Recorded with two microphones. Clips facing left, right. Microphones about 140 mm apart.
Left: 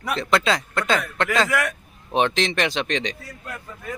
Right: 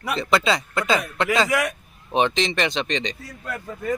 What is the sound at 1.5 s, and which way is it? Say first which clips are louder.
Speech: right 1 dB; 15° right (ahead or behind).